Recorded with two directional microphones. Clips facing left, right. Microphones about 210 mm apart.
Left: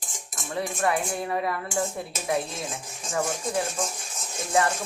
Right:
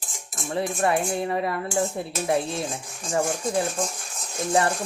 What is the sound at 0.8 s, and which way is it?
Speech, 25° right (ahead or behind).